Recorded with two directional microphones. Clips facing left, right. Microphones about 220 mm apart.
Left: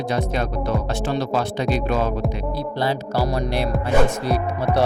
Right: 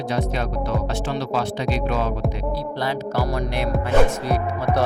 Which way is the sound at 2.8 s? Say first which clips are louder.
Left 3 dB; 30° left (ahead or behind).